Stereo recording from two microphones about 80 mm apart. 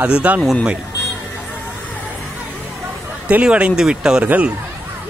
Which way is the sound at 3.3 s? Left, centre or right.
Centre.